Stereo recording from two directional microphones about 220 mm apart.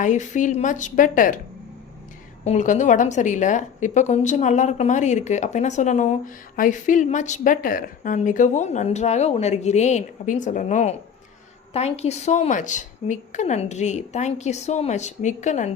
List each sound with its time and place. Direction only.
0.0 s a woman's voice: 35° left (ahead or behind)
2.4 s a woman's voice: 30° left (ahead or behind)